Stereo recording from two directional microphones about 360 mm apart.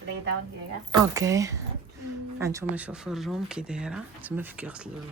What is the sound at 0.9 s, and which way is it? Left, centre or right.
Speech, centre.